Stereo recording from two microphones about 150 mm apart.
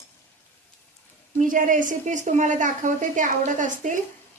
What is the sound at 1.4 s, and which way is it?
A woman's voice, 60° right (ahead or behind).